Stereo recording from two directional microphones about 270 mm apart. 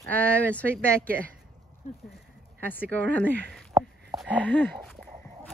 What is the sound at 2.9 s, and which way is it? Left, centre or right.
Speech, centre.